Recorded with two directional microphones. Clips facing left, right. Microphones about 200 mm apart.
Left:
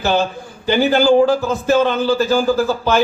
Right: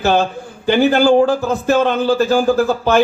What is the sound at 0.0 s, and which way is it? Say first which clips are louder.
A man's voice: right 2 dB; 50° right (ahead or behind).